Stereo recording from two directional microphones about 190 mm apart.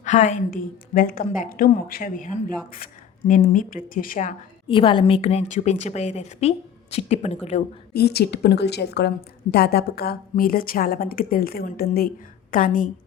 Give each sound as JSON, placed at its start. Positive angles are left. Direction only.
{"t": 0.0, "sound": "a woman's voice", "side_deg": 40}
{"t": 4.7, "sound": "a woman's voice", "side_deg": 25}
{"t": 7.9, "sound": "a woman's voice", "side_deg": 55}